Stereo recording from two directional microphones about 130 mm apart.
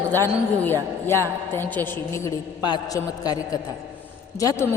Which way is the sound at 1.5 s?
15° left (ahead or behind).